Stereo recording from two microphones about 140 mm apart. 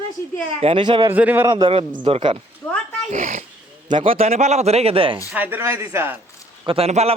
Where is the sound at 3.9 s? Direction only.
40° right (ahead or behind).